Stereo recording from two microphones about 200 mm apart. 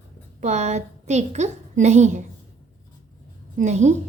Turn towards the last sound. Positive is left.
turn(degrees=-35)  # may be behind; listen again after turning